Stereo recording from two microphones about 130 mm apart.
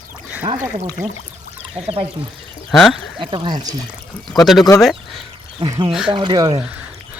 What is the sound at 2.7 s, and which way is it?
Speech, centre (ahead or behind).